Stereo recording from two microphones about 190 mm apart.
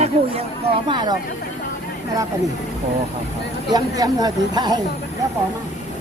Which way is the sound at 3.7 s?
20° right (ahead or behind).